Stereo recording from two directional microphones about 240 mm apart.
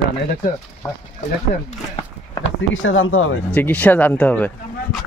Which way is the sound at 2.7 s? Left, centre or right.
Left.